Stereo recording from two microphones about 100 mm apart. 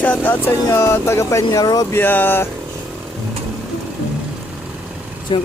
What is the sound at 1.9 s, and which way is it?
Speech, 20° left (ahead or behind).